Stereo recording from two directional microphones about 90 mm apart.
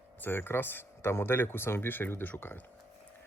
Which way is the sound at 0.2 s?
25° left (ahead or behind).